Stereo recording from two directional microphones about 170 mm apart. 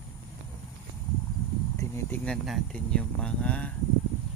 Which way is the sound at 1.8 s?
20° left (ahead or behind).